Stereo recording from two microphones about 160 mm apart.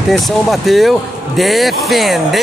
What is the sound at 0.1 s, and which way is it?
Speech, centre (ahead or behind).